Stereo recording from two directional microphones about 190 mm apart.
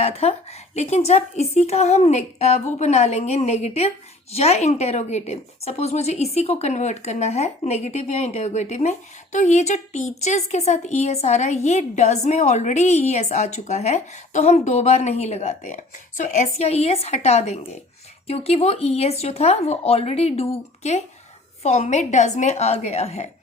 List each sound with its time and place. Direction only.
0.0 s a woman's voice: 35° left (ahead or behind)